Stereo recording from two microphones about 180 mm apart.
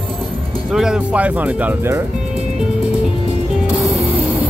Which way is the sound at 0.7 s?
5° right (ahead or behind).